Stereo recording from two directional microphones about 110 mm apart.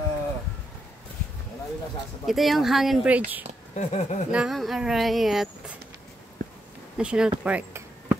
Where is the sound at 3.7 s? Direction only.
90° left.